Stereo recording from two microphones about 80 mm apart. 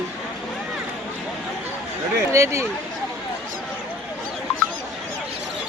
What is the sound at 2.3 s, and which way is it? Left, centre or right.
Speech, right.